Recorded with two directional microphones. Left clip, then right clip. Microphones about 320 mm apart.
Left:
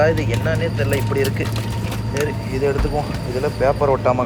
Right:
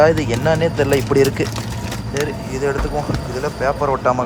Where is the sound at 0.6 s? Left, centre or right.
Right.